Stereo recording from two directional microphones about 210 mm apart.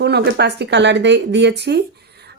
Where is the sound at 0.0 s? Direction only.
50° right (ahead or behind).